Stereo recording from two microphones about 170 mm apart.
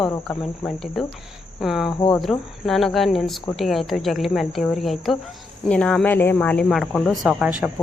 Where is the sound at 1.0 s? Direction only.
Centre (ahead or behind).